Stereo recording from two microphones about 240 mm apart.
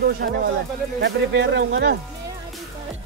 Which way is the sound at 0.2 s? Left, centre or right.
Right.